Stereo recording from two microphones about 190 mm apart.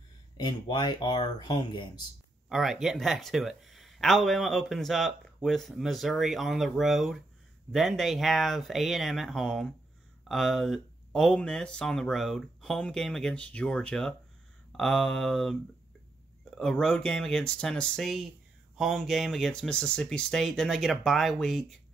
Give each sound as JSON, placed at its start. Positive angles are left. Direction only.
{"t": 0.4, "sound": "speech", "side_deg": 25}
{"t": 2.5, "sound": "speech", "side_deg": 0}